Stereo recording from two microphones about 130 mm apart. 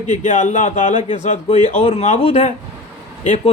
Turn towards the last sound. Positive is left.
turn(degrees=65)  # may be behind; listen again after turning